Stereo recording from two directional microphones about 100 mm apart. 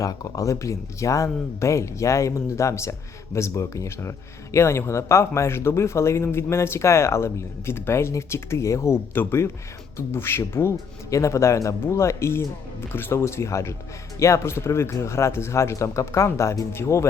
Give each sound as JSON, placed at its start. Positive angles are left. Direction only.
{"t": 0.0, "sound": "speech", "side_deg": 35}